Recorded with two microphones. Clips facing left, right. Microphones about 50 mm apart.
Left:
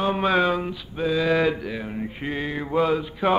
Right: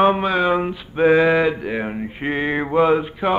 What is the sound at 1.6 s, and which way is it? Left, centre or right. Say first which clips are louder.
Male singing: right 6 dB; right.